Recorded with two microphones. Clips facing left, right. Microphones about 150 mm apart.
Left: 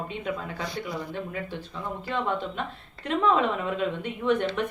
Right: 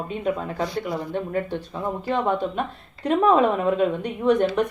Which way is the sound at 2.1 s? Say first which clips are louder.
Right 6 dB; 40° right (ahead or behind).